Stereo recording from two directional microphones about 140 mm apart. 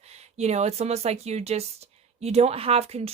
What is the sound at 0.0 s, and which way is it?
Speech, 50° right (ahead or behind).